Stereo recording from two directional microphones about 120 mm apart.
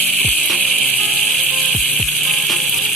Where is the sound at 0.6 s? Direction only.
5° left (ahead or behind).